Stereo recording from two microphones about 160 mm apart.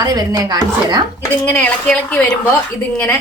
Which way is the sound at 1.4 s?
10° left (ahead or behind).